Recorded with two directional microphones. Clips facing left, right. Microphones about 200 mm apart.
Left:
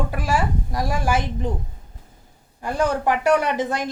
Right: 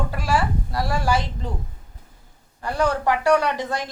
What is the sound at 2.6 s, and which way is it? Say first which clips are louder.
A woman's voice: left 1 dB; 15° left (ahead or behind).